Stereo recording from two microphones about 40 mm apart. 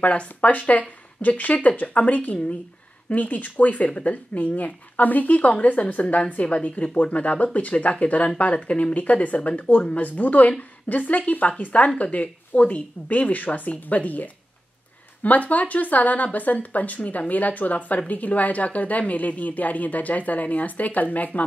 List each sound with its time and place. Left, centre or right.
0.0 s speech: left